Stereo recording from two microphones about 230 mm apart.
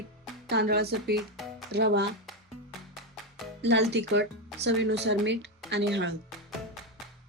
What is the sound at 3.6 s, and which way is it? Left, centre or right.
Speech, right.